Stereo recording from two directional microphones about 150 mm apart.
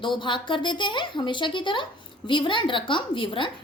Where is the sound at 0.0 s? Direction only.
30° left (ahead or behind).